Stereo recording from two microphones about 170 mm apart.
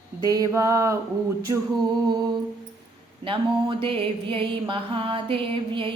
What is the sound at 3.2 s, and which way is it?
Mantra, 30° right (ahead or behind).